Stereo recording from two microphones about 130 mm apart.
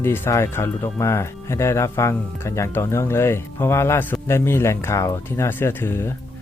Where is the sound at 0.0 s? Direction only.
20° left (ahead or behind).